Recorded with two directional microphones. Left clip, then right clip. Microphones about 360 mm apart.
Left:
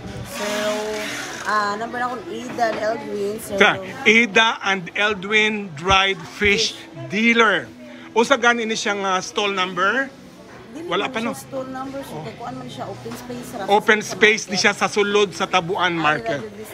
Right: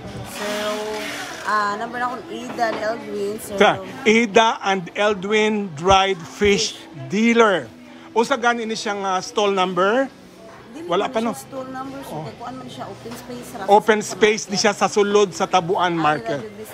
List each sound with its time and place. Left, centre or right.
1.5 s a man's voice: centre